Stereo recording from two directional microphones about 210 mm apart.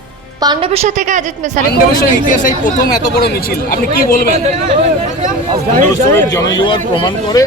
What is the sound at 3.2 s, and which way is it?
Speech, 45° left (ahead or behind).